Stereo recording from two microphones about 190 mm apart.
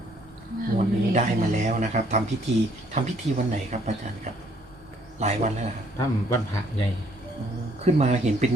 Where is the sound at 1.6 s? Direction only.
40° right (ahead or behind).